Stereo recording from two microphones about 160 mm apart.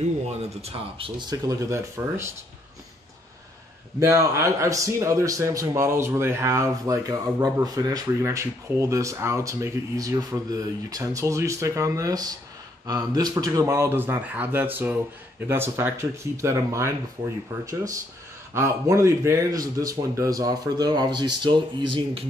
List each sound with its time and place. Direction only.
0.3 s a man's voice: 40° right (ahead or behind); by 2.3 s 15° right (ahead or behind)
4.0 s a man's voice: 15° right (ahead or behind)
18.5 s a man's voice: 20° right (ahead or behind)